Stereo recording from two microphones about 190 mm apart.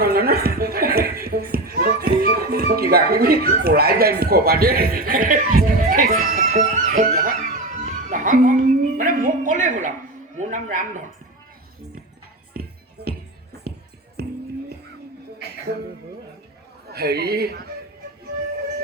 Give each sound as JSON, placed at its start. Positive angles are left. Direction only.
{"t": 0.0, "sound": "a sound", "side_deg": -55}
{"t": 10.3, "sound": "a woman's voice", "side_deg": -40}
{"t": 14.2, "sound": "music", "side_deg": -55}
{"t": 15.7, "sound": "speech", "side_deg": -60}
{"t": 16.9, "sound": "speech", "side_deg": -55}